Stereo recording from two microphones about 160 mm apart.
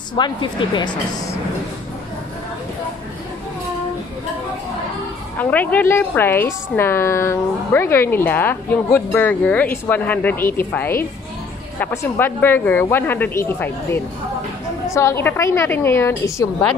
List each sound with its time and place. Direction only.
0.1 s speech: 30° left (ahead or behind)
5.4 s a woman's voice: 10° left (ahead or behind)